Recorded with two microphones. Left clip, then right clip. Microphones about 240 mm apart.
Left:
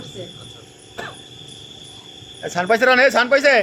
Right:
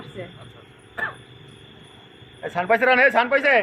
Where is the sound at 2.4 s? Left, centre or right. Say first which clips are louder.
Left 3 dB; left.